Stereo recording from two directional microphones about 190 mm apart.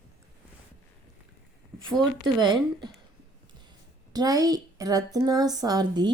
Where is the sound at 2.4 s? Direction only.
25° right (ahead or behind).